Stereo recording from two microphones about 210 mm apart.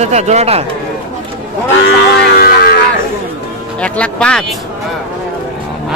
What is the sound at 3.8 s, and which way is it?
Speech, 5° left (ahead or behind).